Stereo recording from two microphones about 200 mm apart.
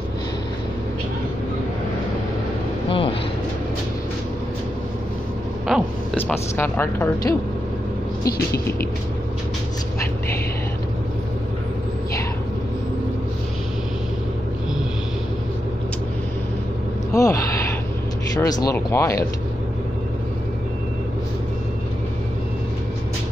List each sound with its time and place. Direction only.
2.9 s vehicle: 25° left (ahead or behind)
5.7 s a sound: centre (ahead or behind)
6.3 s speech: 10° left (ahead or behind)
17.1 s gasp: 15° left (ahead or behind)
18.7 s speech: 15° left (ahead or behind)